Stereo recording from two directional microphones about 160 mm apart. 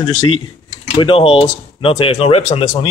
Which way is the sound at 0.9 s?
35° left (ahead or behind).